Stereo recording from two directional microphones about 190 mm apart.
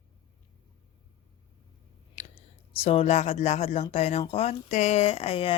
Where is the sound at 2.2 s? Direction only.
40° left (ahead or behind).